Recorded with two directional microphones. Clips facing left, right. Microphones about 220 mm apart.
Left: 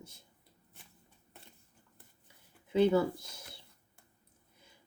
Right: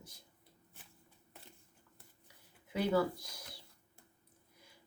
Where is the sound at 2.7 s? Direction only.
25° left (ahead or behind).